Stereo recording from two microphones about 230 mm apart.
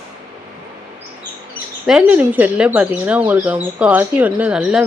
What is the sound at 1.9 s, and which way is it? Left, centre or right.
Speech, centre.